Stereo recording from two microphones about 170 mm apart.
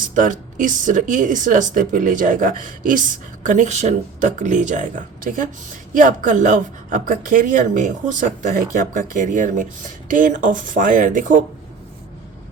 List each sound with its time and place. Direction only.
0.1 s a woman's voice: 50° right (ahead or behind)